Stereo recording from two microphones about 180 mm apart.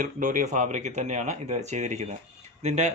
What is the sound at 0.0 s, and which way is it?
Speech, 45° right (ahead or behind).